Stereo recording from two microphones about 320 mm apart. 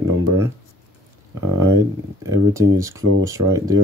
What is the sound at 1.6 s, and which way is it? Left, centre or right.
Speech, centre.